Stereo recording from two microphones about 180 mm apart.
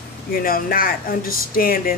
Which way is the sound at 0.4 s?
50° left (ahead or behind).